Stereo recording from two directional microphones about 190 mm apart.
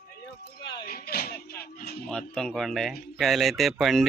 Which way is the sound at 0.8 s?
50° left (ahead or behind).